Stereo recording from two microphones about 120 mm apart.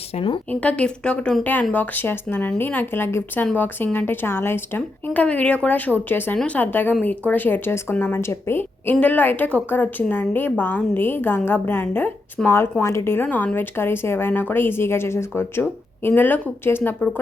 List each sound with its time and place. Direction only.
0.5 s speech: 10° left (ahead or behind)